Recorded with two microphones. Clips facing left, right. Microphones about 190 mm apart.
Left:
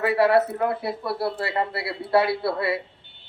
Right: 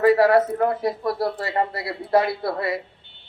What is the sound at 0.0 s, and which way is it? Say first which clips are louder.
Speech: right 3 dB; 40° right (ahead or behind).